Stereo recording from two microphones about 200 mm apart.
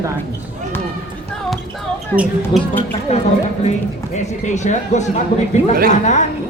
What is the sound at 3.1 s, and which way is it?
Speech, 30° left (ahead or behind).